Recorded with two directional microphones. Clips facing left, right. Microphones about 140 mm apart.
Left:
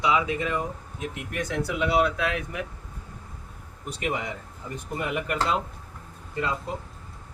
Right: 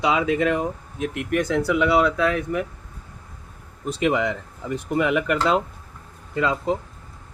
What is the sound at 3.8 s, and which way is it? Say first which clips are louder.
Speech: right 9 dB; 90° right.